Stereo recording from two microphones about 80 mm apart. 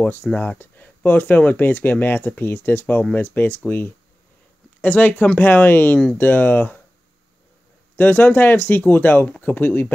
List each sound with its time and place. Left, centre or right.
0.3 s speech: centre
7.9 s speech: left